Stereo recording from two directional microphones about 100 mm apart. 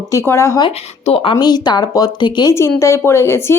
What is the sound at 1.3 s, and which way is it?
Speech, 45° left (ahead or behind).